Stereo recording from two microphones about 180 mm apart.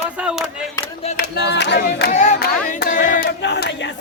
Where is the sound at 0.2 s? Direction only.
5° right (ahead or behind).